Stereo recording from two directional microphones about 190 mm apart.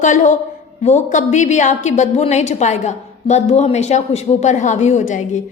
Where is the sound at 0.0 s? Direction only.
40° left (ahead or behind).